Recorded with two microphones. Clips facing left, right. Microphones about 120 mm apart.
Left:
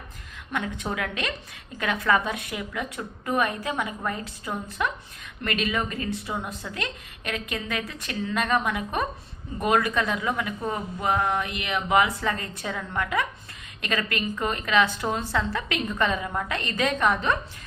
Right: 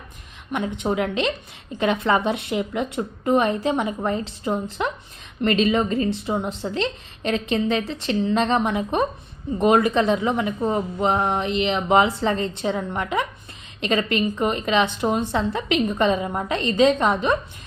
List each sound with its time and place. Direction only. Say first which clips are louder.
0.5 s a woman's voice: right 6 dB; 25° right (ahead or behind)